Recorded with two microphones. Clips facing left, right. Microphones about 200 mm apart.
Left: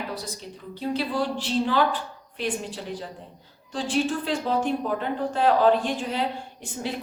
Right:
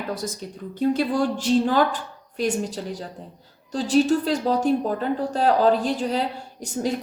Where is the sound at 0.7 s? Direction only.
50° right (ahead or behind).